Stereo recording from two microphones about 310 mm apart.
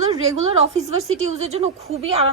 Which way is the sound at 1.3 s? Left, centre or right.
Right.